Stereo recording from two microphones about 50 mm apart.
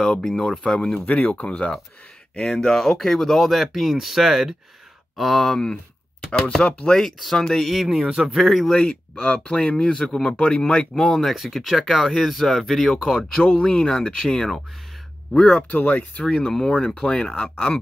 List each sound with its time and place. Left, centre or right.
0.0 s speech: centre
0.9 s speech: left
2.3 s speech: centre
6.6 s speech: left
7.0 s speech: centre
7.8 s speech: centre
9.1 s speech: left
9.5 s speech: centre
11.3 s speech: centre
13.6 s speech: centre
15.3 s speech: left
16.3 s speech: centre